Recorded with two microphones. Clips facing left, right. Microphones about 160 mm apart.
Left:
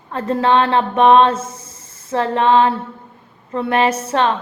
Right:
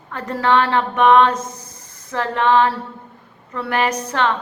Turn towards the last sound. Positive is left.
turn(degrees=20)  # may be behind; listen again after turning